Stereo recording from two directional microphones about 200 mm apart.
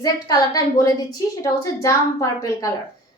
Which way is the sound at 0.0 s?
15° left (ahead or behind).